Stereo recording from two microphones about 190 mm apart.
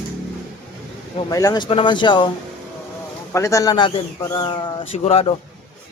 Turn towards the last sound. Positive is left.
turn(degrees=30)  # may be behind; listen again after turning